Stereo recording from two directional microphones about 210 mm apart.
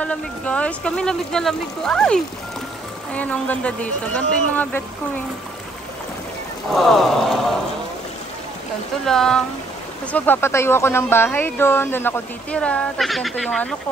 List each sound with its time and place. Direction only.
0.0 s speech: 5° left (ahead or behind)
6.7 s speech: centre (ahead or behind)
9.0 s speech: centre (ahead or behind)